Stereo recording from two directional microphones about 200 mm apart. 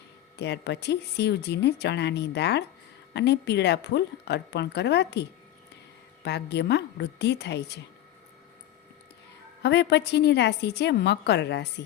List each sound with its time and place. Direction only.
0.3 s speech: 60° left (ahead or behind)
9.6 s speech: 60° left (ahead or behind)